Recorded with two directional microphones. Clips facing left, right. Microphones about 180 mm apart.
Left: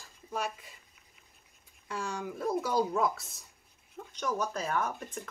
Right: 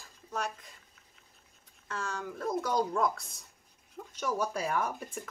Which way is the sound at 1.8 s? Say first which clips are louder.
Left 1 dB; 15° left (ahead or behind).